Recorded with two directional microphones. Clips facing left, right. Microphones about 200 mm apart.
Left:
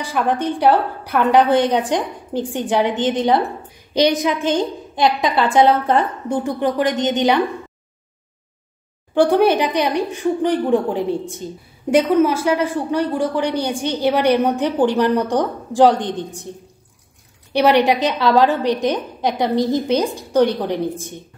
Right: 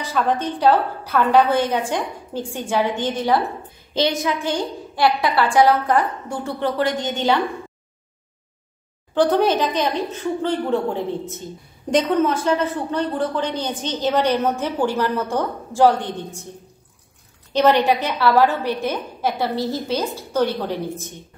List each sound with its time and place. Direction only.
0.0 s a woman's voice: 15° left (ahead or behind)
9.1 s a woman's voice: 10° left (ahead or behind)
17.5 s a woman's voice: 15° left (ahead or behind)